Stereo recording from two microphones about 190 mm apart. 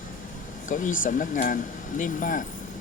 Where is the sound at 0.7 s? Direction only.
45° left (ahead or behind).